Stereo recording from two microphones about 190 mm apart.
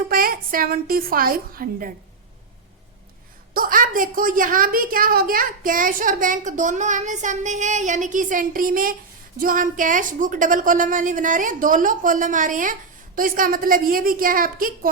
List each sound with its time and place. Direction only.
0.1 s a woman's voice: 50° right (ahead or behind)
3.5 s a woman's voice: 50° right (ahead or behind)